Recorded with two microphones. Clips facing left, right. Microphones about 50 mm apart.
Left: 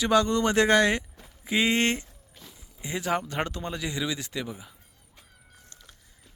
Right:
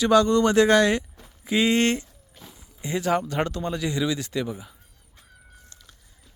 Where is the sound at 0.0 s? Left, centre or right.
Centre.